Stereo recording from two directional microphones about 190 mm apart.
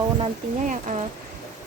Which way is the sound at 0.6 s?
40° right (ahead or behind).